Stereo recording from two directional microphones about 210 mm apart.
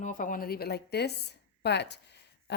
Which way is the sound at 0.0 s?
40° left (ahead or behind).